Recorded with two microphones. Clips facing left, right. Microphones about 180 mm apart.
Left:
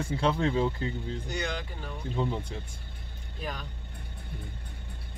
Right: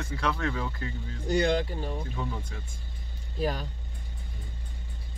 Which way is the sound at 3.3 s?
35° right (ahead or behind).